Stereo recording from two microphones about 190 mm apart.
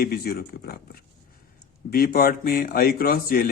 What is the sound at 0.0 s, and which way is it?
Speech, 50° left (ahead or behind).